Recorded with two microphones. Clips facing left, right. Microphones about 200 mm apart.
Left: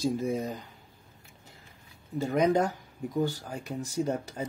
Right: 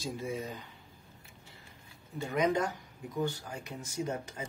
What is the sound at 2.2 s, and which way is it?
Speech, 40° left (ahead or behind).